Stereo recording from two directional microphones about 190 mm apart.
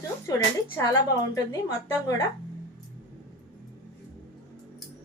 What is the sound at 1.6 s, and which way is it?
Speech, 15° left (ahead or behind).